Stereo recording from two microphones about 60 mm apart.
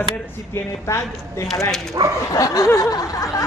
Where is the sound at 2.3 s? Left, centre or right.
Left.